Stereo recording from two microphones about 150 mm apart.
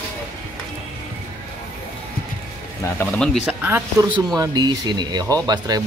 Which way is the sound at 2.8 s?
15° left (ahead or behind).